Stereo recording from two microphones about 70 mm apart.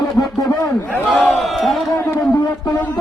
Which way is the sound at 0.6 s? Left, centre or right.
Left.